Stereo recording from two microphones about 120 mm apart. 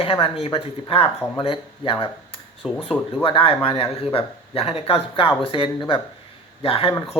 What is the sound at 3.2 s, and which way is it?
Speech, 50° left (ahead or behind).